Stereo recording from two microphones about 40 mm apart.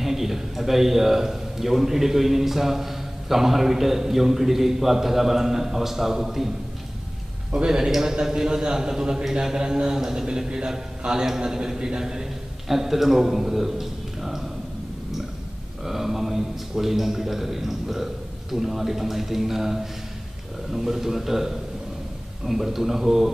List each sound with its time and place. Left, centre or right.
0.0 s a man's voice: centre
7.5 s a man's voice: centre
15.8 s a man's voice: centre